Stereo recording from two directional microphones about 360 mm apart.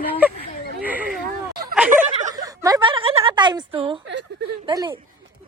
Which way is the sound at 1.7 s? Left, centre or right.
Centre.